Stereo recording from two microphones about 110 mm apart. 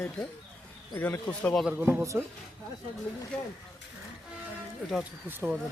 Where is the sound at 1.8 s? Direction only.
20° right (ahead or behind).